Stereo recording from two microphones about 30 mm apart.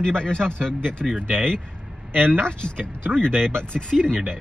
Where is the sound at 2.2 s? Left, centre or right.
Left.